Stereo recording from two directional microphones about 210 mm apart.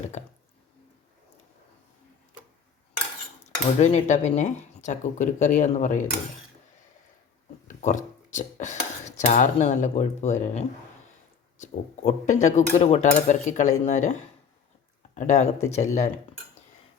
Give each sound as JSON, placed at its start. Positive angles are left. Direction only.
{"t": 3.4, "sound": "cutlery", "side_deg": 30}
{"t": 7.7, "sound": "speech", "side_deg": 35}
{"t": 11.5, "sound": "cutlery", "side_deg": 35}